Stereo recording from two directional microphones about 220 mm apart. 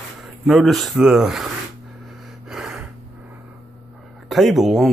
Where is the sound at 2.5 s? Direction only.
Centre (ahead or behind).